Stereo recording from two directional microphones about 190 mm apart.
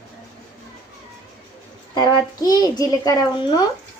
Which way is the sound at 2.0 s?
20° left (ahead or behind).